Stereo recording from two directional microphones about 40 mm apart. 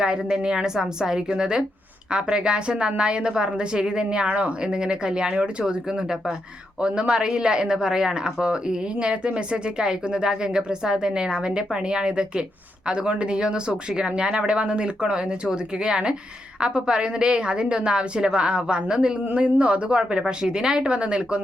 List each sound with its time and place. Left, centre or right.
0.0 s speech: right